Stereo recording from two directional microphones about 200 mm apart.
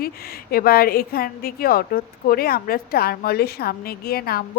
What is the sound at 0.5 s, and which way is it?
A woman's voice, 50° left (ahead or behind).